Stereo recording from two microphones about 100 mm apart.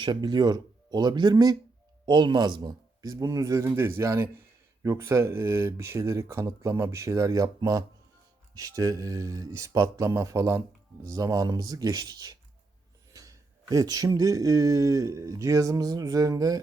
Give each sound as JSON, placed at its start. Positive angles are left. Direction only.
{"t": 0.0, "sound": "speech", "side_deg": -50}